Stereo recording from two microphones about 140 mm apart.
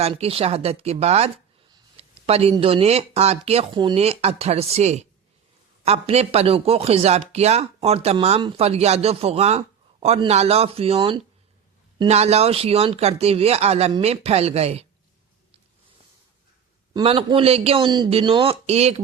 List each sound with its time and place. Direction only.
0.2 s speech: 45° right (ahead or behind)
16.9 s a man's voice: 40° right (ahead or behind)